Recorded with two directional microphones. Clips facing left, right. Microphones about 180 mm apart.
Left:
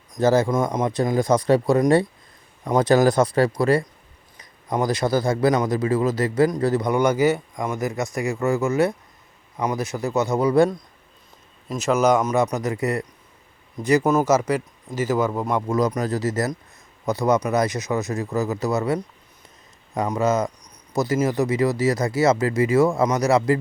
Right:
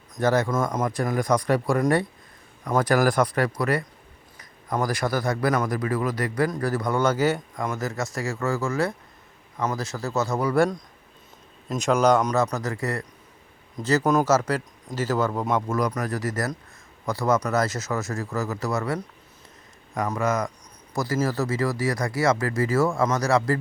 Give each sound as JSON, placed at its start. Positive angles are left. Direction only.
{"t": 0.1, "sound": "speech", "side_deg": 25}
{"t": 11.7, "sound": "speech", "side_deg": 5}